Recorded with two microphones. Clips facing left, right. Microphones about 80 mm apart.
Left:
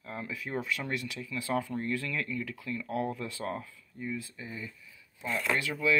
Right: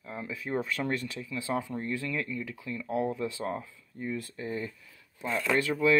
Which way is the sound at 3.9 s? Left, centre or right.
Right.